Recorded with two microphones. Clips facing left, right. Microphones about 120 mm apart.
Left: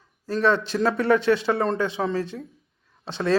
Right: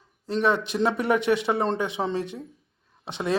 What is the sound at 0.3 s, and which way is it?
Speech, 20° right (ahead or behind).